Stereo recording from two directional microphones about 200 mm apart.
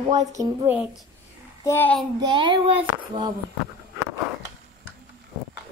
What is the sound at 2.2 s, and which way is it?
A woman's voice, 25° right (ahead or behind).